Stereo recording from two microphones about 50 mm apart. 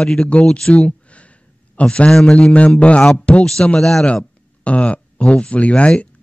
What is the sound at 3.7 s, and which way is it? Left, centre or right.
Speech, centre.